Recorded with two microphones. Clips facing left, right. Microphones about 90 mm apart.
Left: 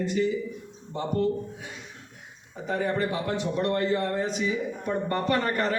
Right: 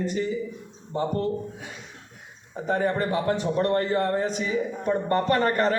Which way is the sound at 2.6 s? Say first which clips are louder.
Right 3 dB; 40° right (ahead or behind).